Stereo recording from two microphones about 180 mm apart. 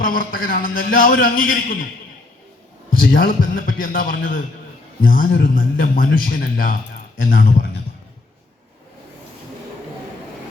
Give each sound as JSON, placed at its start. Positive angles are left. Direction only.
{"t": 0.0, "sound": "a man's voice", "side_deg": 50}
{"t": 2.9, "sound": "a man's voice", "side_deg": 50}